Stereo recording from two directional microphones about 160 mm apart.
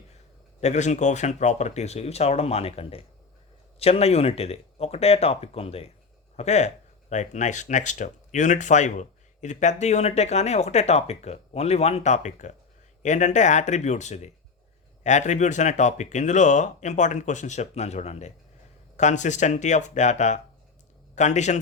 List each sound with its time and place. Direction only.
0.6 s speech: 45° left (ahead or behind)